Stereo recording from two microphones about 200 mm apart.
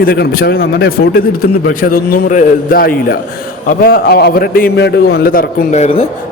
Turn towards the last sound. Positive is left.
turn(degrees=30)  # may be behind; listen again after turning